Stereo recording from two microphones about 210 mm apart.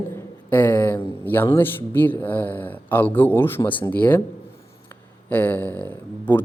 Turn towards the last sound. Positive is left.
turn(degrees=10)  # may be behind; listen again after turning